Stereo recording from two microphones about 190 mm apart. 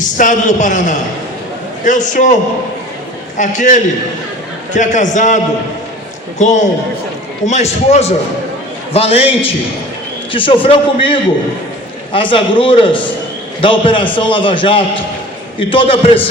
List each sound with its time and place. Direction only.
0.2 s a man's voice: 40° left (ahead or behind)
3.3 s a man's voice: 40° left (ahead or behind)
6.4 s a man's voice: 40° left (ahead or behind)
10.3 s a man's voice: 25° left (ahead or behind)